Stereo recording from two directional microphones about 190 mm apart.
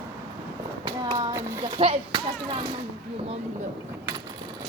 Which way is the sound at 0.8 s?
20° right (ahead or behind).